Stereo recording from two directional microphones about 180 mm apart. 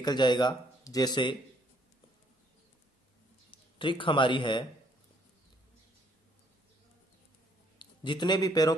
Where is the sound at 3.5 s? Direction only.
30° left (ahead or behind).